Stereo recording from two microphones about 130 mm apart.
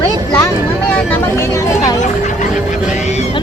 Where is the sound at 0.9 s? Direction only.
10° left (ahead or behind).